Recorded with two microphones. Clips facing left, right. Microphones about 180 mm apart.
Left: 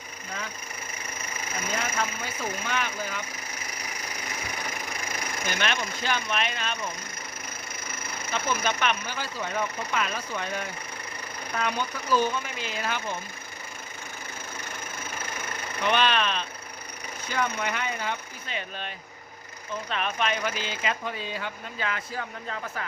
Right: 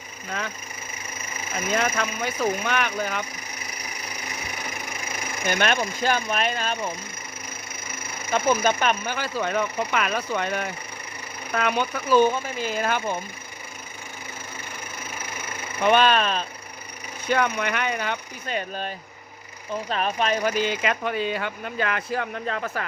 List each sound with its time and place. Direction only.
1.8 s speech: 65° right (ahead or behind)
5.5 s speech: 50° right (ahead or behind)
8.3 s speech: 50° right (ahead or behind)
9.1 s speech: 80° right
12.5 s speech: 45° right (ahead or behind)
15.8 s speech: 45° right (ahead or behind)
17.2 s speech: 65° right (ahead or behind)
18.4 s speech: 45° right (ahead or behind)
19.9 s speech: 40° right (ahead or behind)
20.6 s speech: 60° right (ahead or behind)